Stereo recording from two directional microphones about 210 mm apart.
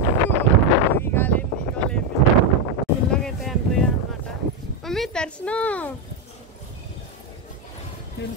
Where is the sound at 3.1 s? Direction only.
Centre (ahead or behind).